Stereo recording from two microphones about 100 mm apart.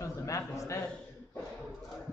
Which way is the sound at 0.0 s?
30° left (ahead or behind).